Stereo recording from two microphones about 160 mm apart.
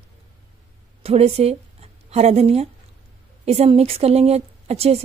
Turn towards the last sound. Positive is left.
turn(degrees=-40)  # may be behind; listen again after turning